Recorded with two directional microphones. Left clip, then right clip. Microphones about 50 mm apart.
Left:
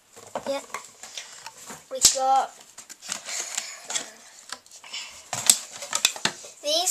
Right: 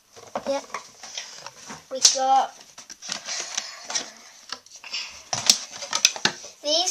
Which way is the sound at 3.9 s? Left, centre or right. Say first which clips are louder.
Right 3 dB; centre.